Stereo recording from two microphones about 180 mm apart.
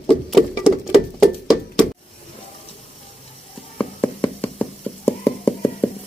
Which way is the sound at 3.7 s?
10° left (ahead or behind).